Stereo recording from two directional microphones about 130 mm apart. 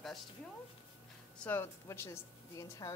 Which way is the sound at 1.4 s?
15° left (ahead or behind).